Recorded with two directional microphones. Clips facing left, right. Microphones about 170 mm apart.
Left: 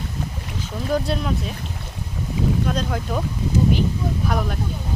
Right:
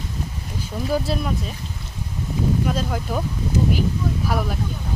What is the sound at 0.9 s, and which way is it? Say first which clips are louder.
Speech: left 1 dB; 5° right (ahead or behind).